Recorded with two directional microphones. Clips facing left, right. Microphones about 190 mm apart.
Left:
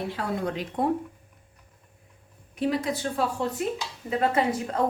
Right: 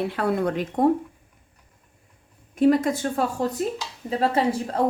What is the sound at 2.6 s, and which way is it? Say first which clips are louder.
A woman's voice: right 8 dB; 50° right (ahead or behind).